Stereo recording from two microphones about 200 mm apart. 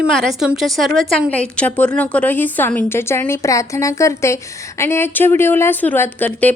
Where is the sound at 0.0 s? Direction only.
Centre (ahead or behind).